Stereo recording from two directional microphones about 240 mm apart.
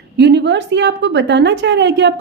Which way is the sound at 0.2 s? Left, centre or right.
Right.